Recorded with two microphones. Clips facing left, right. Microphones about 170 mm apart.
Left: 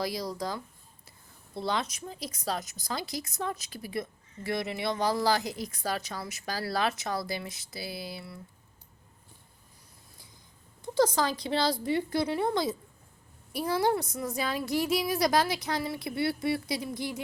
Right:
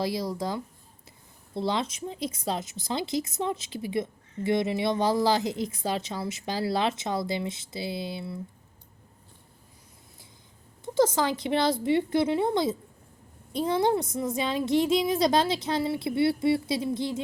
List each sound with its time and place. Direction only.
0.0 s speech: 25° right (ahead or behind)
10.8 s speech: 20° right (ahead or behind)